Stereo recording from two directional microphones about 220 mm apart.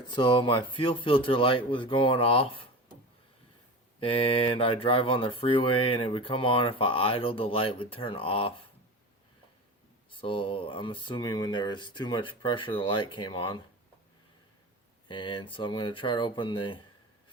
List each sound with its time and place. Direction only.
0.1 s speech: 20° left (ahead or behind)
4.0 s speech: 25° left (ahead or behind)
10.1 s speech: 25° left (ahead or behind)
15.0 s speech: 20° left (ahead or behind)